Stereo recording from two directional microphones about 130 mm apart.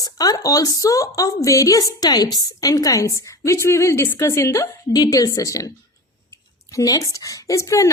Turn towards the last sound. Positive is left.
turn(degrees=25)  # may be behind; listen again after turning